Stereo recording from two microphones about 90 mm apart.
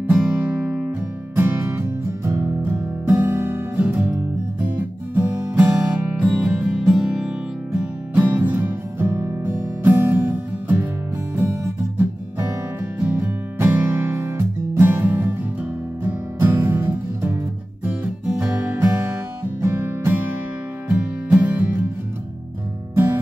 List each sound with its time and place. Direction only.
0.0 s music: 15° right (ahead or behind)
1.3 s music: 25° right (ahead or behind)
13.0 s music: 20° right (ahead or behind)
17.8 s music: 10° right (ahead or behind)
20.9 s music: 10° right (ahead or behind)